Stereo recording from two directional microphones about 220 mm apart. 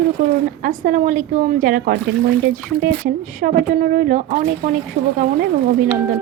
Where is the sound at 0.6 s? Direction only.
35° right (ahead or behind).